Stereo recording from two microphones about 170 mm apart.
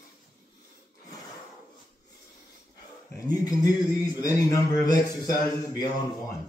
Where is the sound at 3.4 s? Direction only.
20° left (ahead or behind).